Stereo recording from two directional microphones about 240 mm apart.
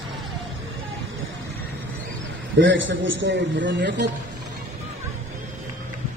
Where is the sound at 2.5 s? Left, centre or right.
Right.